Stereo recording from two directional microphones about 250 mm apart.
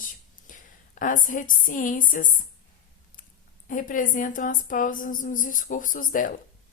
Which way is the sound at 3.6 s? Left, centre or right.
Left.